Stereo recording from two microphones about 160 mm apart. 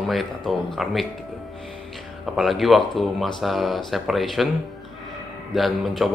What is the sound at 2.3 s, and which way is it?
A man's voice, centre (ahead or behind).